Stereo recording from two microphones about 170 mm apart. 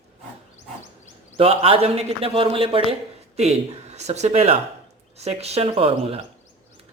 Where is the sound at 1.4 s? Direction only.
35° right (ahead or behind).